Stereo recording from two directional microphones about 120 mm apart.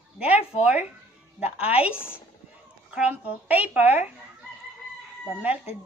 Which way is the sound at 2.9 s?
10° right (ahead or behind).